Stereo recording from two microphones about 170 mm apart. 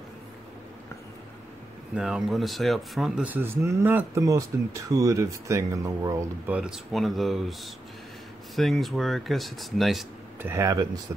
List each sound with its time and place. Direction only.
2.0 s speech: 5° right (ahead or behind)
10.4 s speech: 15° right (ahead or behind)